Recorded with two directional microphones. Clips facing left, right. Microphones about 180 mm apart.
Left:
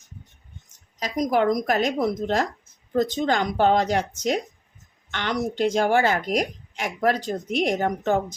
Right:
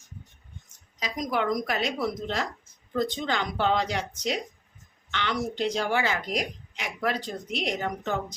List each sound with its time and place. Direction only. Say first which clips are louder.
0.9 s a woman's voice: left 7 dB; 40° left (ahead or behind)
5.1 s a woman's voice: left 4 dB; 45° left (ahead or behind)